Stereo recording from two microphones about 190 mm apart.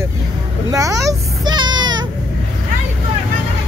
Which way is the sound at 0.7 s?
15° right (ahead or behind).